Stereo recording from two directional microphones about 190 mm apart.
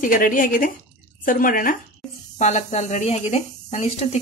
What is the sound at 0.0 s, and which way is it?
Speech, 45° left (ahead or behind).